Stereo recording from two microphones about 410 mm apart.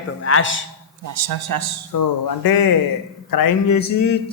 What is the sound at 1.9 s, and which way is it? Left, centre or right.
Speech, left.